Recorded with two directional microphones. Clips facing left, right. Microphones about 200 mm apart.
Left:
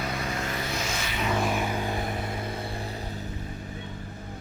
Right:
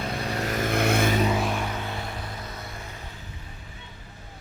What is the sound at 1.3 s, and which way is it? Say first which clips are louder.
Vehicle: even; centre (ahead or behind).